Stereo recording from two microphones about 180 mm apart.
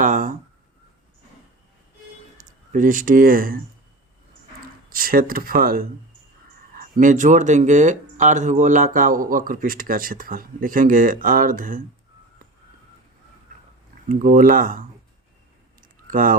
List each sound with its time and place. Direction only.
0.0 s speech: 45° right (ahead or behind)
2.4 s a sound: 50° right (ahead or behind)
2.7 s speech: 45° right (ahead or behind)
4.9 s speech: 50° right (ahead or behind)
14.1 s speech: 45° right (ahead or behind)
16.0 s speech: 50° right (ahead or behind)